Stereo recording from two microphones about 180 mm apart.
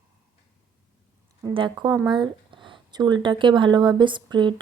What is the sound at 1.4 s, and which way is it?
Speech, 25° right (ahead or behind).